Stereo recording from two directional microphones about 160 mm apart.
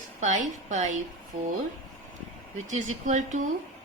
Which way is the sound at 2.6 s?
50° right (ahead or behind).